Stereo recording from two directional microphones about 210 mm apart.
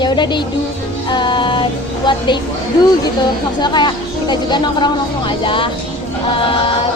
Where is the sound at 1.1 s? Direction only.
20° left (ahead or behind).